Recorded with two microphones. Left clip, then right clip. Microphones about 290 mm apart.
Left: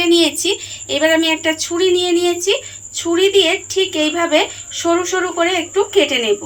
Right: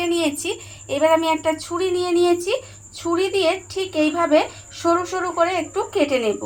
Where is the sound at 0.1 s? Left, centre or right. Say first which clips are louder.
Left 8 dB; right.